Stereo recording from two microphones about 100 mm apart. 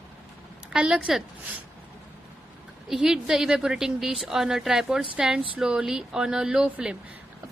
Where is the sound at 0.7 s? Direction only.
5° right (ahead or behind).